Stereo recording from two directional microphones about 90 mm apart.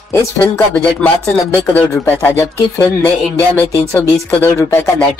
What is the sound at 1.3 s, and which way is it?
Speech, 15° left (ahead or behind).